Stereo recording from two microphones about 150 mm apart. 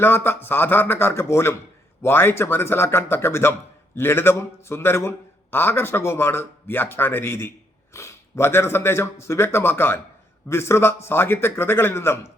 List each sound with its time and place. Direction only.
0.0 s a man's voice: 15° left (ahead or behind)